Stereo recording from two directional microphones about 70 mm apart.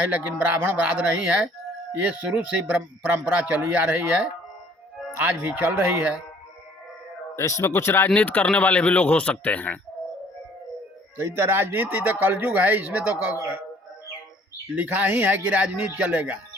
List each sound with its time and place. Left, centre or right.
0.1 s speech: right
7.3 s a man's voice: left
7.6 s speech: left
8.1 s speech: left
11.2 s speech: right
14.8 s speech: right